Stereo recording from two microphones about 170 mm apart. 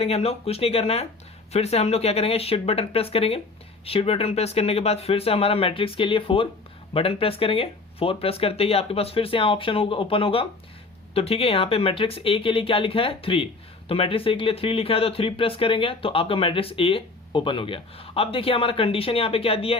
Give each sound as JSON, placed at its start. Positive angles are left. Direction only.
{"t": 0.0, "sound": "speech", "side_deg": 35}